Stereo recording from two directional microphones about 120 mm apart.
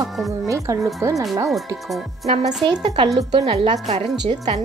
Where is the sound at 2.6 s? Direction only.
45° right (ahead or behind).